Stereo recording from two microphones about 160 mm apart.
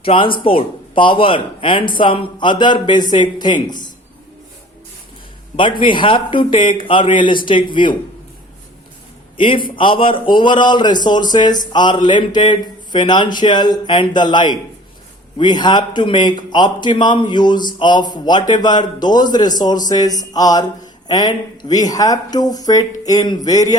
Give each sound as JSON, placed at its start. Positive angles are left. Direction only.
{"t": 0.0, "sound": "speech", "side_deg": 35}
{"t": 5.5, "sound": "speech", "side_deg": 30}
{"t": 9.4, "sound": "a man's voice", "side_deg": 30}